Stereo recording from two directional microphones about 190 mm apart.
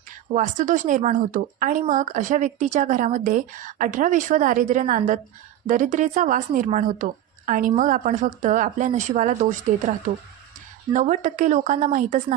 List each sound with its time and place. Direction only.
0.3 s speech: 40° right (ahead or behind)
10.9 s speech: 40° right (ahead or behind)